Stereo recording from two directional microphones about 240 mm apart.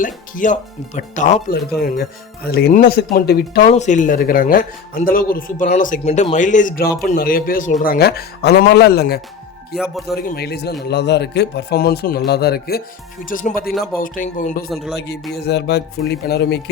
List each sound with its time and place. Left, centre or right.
0.0 s speech: left
3.7 s speech: left
9.7 s speech: centre
10.2 s speech: left
14.9 s speech: left